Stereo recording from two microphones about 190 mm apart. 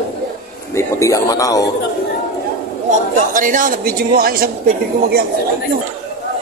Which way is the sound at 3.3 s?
45° right (ahead or behind).